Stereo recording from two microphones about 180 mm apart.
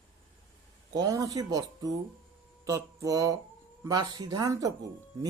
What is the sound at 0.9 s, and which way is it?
Speech, 20° right (ahead or behind).